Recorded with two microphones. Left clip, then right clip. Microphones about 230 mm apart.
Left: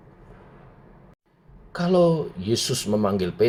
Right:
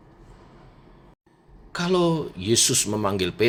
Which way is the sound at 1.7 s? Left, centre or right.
Right.